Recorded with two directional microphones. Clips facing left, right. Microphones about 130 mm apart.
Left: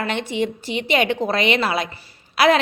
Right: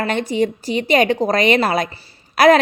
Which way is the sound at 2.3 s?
45° right (ahead or behind).